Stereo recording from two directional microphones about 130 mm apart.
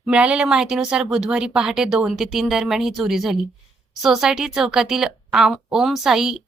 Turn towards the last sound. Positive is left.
turn(degrees=-5)  # may be behind; listen again after turning